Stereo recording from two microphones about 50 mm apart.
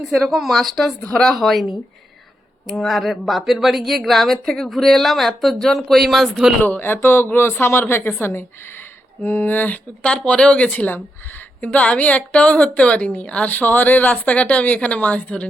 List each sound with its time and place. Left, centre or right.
0.1 s speech: centre
2.7 s speech: centre
6.8 s speech: left
10.2 s speech: left
13.5 s speech: left